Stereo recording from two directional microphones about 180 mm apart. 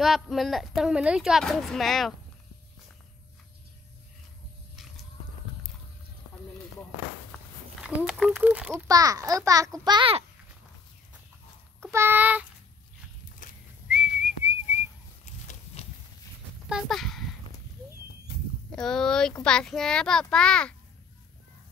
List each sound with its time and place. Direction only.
0.0 s a woman's voice: centre (ahead or behind)
7.8 s speech: 5° right (ahead or behind)
8.8 s a child's voice: 20° right (ahead or behind)
11.8 s speech: 15° right (ahead or behind)
13.4 s whistling: 45° left (ahead or behind)
13.8 s whistling: 5° right (ahead or behind)
15.8 s horse: 35° left (ahead or behind)
16.6 s speech: centre (ahead or behind)
18.8 s a woman's voice: 5° left (ahead or behind)